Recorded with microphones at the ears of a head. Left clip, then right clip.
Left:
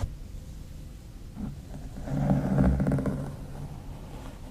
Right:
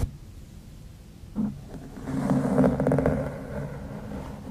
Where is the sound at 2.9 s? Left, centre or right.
Right.